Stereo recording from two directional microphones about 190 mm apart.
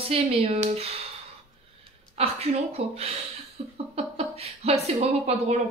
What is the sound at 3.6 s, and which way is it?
Laughter, 35° right (ahead or behind).